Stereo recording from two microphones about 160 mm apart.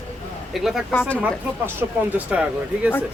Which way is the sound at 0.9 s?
10° left (ahead or behind).